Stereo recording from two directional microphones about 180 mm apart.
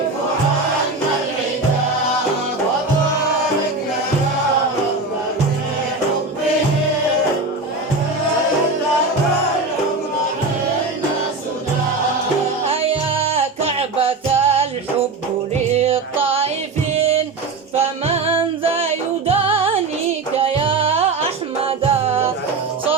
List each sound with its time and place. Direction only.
12.6 s music: 30° right (ahead or behind)
15.7 s music: 35° right (ahead or behind)
17.7 s music: 35° right (ahead or behind)